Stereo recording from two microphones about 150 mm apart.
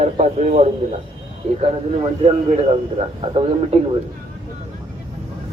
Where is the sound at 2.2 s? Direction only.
45° right (ahead or behind).